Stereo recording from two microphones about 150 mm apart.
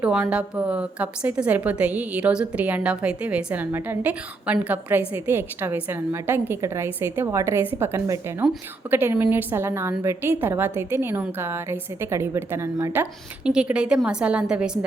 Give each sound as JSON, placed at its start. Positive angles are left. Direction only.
{"t": 0.0, "sound": "a woman's voice", "side_deg": -5}